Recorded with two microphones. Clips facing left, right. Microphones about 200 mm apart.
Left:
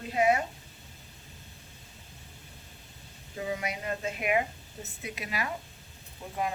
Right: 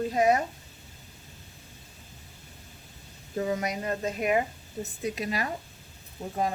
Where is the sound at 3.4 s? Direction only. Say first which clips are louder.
Right 5 dB; 45° right (ahead or behind).